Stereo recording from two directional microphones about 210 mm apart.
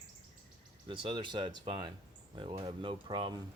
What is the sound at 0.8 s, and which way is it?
Speech, 25° right (ahead or behind).